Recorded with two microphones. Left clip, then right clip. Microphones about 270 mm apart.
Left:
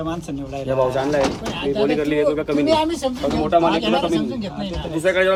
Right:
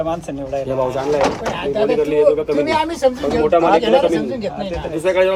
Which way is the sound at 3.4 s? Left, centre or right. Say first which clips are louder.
Right 4 dB; left.